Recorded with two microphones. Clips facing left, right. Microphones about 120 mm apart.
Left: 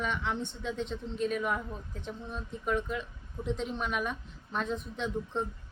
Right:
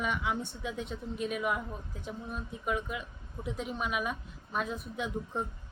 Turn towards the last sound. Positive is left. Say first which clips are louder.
# left 2 dB
turn(degrees=-10)  # may be behind; listen again after turning